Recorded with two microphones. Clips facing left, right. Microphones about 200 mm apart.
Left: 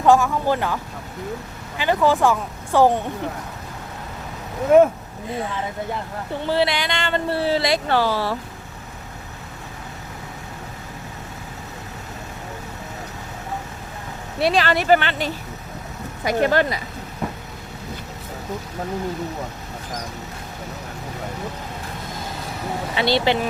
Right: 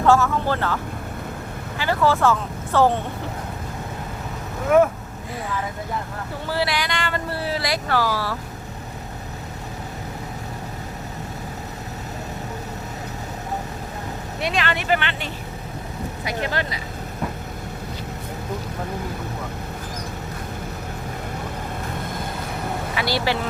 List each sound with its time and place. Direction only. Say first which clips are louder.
0.0 s speech: left 1 dB; 15° left (ahead or behind)
1.8 s speech: left 2 dB; 15° left (ahead or behind)
6.4 s speech: left 4 dB; 25° left (ahead or behind)
14.4 s speech: left 6 dB; 35° left (ahead or behind)
23.0 s speech: left 5 dB; 25° left (ahead or behind)